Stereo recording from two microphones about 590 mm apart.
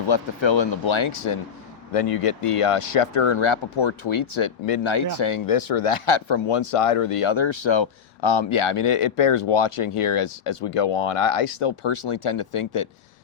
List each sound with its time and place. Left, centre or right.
0.1 s speech: left
1.9 s speech: left